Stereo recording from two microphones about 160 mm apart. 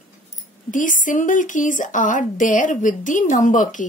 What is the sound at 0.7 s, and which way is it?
A woman's voice, 55° left (ahead or behind).